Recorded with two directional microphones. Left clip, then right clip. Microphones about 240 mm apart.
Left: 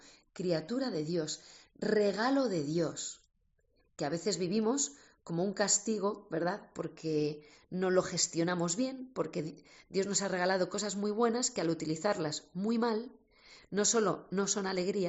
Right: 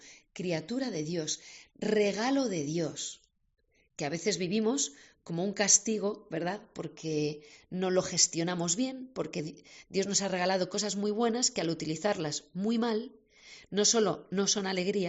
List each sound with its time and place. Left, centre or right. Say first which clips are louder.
0.3 s speech: even; right
4.2 s speech: right 4 dB; right